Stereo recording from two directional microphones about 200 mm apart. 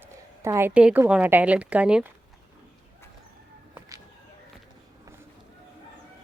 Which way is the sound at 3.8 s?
15° right (ahead or behind).